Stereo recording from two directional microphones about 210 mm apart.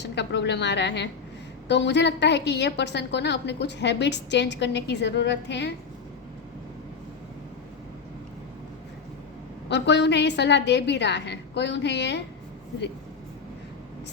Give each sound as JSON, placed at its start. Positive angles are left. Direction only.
{"t": 0.0, "sound": "a woman's voice", "side_deg": 55}
{"t": 9.6, "sound": "a woman's voice", "side_deg": 55}